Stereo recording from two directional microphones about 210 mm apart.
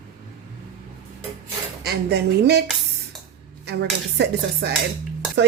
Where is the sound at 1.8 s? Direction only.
50° right (ahead or behind).